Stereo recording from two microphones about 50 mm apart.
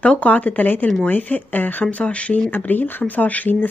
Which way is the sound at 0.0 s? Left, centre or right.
Left.